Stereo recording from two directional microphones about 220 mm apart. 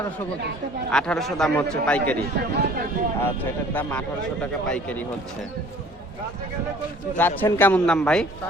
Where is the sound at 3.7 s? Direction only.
5° left (ahead or behind).